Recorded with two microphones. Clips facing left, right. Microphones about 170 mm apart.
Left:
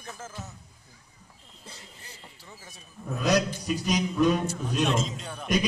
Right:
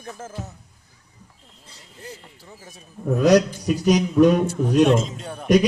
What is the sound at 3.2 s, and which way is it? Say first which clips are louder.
A man's voice: right 9 dB; 70° right (ahead or behind).